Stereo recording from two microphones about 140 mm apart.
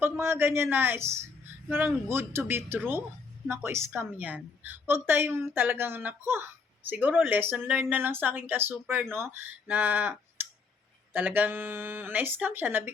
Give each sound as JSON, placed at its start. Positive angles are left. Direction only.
{"t": 0.0, "sound": "a woman's voice", "side_deg": -15}